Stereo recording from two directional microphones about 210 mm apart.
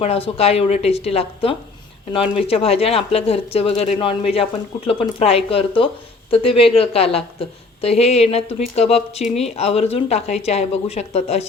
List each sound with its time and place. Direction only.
0.0 s speech: 30° left (ahead or behind)